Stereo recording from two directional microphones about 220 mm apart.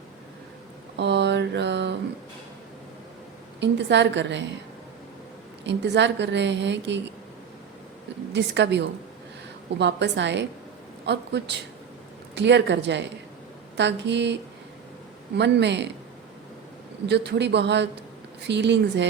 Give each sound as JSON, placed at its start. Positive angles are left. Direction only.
{"t": 0.9, "sound": "a sound", "side_deg": -50}
{"t": 3.6, "sound": "a woman's voice", "side_deg": -50}
{"t": 5.6, "sound": "a woman's voice", "side_deg": -50}
{"t": 8.3, "sound": "a woman's voice", "side_deg": -50}
{"t": 15.4, "sound": "a woman's voice", "side_deg": -50}
{"t": 17.1, "sound": "a woman's voice", "side_deg": -50}